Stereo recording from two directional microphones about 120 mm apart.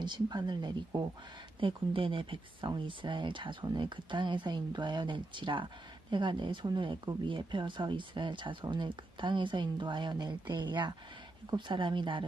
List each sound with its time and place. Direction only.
0.0 s speech: 35° right (ahead or behind)